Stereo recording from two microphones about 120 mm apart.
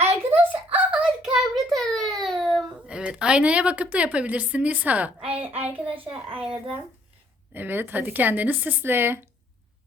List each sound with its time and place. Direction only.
0.3 s a sound: 15° right (ahead or behind); by 2.1 s centre (ahead or behind)
2.2 s baby cry: centre (ahead or behind)
2.6 s a woman's voice: 10° right (ahead or behind)
7.5 s a woman's voice: 15° right (ahead or behind)